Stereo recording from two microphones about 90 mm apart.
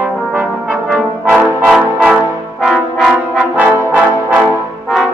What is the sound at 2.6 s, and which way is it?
Brass instrument, 5° left (ahead or behind).